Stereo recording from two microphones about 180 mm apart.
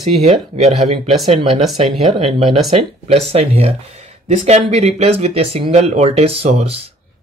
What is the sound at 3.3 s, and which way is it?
Speech, 35° right (ahead or behind).